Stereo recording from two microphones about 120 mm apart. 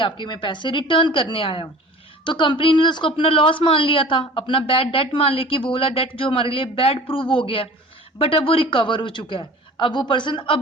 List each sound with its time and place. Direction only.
0.0 s speech: 40° left (ahead or behind)